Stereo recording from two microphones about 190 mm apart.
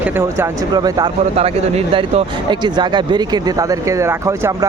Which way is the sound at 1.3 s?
30° right (ahead or behind).